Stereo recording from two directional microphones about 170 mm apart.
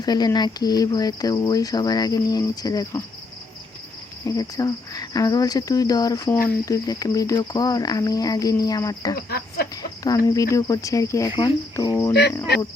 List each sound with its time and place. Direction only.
0.0 s speech: 25° left (ahead or behind)
4.3 s speech: 20° left (ahead or behind)
9.1 s speech: 65° left (ahead or behind)
10.0 s speech: 20° left (ahead or behind)